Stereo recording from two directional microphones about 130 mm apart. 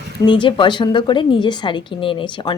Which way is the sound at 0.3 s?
40° left (ahead or behind).